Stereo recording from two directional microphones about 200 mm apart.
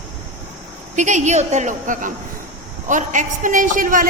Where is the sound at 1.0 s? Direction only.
35° right (ahead or behind).